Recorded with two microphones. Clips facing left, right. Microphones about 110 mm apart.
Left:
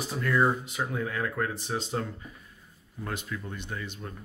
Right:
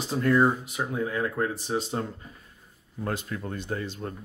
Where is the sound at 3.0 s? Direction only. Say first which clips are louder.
Right 4 dB; 40° right (ahead or behind).